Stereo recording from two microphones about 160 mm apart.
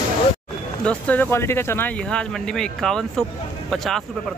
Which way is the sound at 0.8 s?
10° left (ahead or behind).